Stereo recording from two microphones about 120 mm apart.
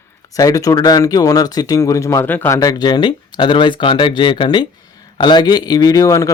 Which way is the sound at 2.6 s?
35° left (ahead or behind).